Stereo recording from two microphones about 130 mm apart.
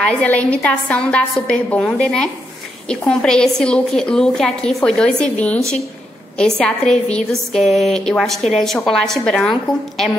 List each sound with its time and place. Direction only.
0.0 s a woman's voice: 10° left (ahead or behind)
6.6 s a woman's voice: 5° left (ahead or behind)